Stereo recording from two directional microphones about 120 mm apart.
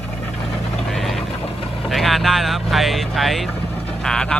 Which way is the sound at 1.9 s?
Centre (ahead or behind).